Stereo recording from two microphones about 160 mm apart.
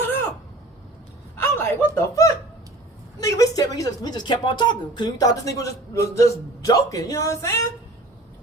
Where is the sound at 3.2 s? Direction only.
20° left (ahead or behind).